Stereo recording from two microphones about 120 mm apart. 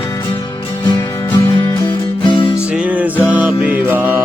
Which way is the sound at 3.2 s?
15° right (ahead or behind).